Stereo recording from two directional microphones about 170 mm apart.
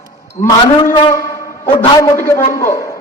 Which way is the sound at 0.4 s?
25° left (ahead or behind).